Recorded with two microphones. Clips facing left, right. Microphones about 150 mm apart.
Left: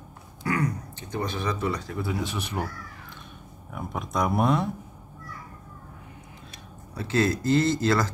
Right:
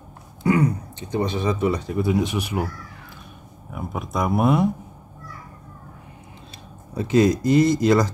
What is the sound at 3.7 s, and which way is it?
Speech, centre (ahead or behind).